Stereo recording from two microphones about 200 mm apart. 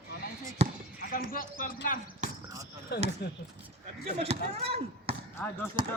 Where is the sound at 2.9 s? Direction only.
55° left (ahead or behind).